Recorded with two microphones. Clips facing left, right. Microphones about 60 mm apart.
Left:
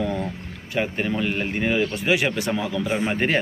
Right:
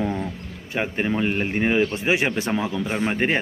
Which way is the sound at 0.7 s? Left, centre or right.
Right.